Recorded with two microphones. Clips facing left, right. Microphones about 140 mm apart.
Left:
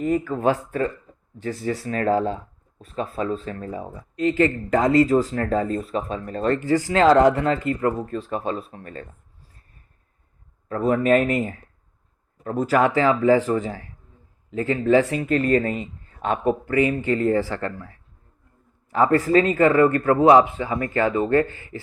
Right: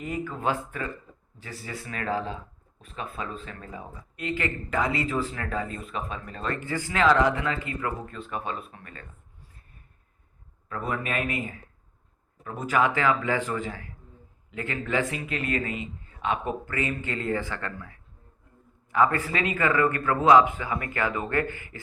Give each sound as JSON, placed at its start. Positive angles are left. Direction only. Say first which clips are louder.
{"t": 0.0, "sound": "speech", "louder": "left 8 dB", "side_deg": 40}
{"t": 10.7, "sound": "speech", "louder": "left 12 dB", "side_deg": 35}
{"t": 16.6, "sound": "speech", "louder": "left 10 dB", "side_deg": 30}